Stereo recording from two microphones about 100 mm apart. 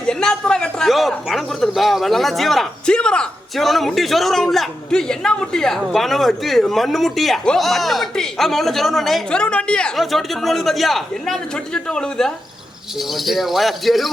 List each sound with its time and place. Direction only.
0.1 s speech: 5° left (ahead or behind)